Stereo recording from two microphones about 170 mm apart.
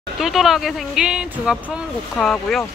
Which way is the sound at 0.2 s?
Centre (ahead or behind).